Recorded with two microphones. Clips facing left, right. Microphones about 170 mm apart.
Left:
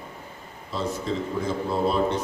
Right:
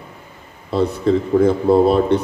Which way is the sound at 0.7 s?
60° right (ahead or behind).